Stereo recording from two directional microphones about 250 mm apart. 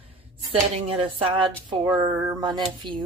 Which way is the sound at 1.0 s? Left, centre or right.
Right.